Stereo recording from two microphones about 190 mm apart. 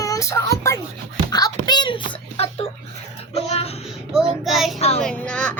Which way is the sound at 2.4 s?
35° left (ahead or behind).